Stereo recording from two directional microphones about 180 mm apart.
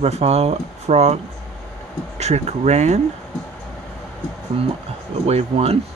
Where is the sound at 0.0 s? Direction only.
35° right (ahead or behind).